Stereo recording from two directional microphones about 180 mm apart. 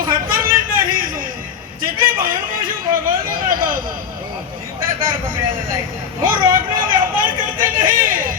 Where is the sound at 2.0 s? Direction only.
50° right (ahead or behind).